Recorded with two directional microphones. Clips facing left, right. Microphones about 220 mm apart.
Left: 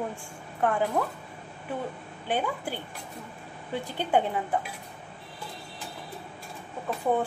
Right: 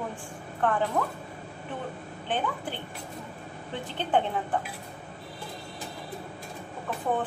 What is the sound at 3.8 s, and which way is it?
Speech, 10° left (ahead or behind).